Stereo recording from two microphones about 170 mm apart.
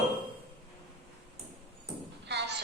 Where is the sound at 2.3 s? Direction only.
80° right.